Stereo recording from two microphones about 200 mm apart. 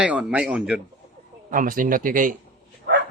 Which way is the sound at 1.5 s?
45° right (ahead or behind).